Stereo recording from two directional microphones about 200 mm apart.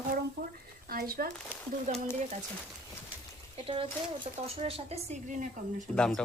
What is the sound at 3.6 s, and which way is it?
A woman's voice, 25° right (ahead or behind).